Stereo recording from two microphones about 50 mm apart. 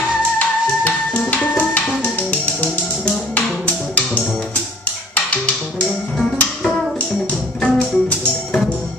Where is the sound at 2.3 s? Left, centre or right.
Left.